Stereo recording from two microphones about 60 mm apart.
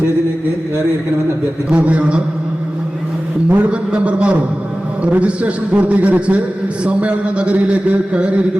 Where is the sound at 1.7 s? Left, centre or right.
Right.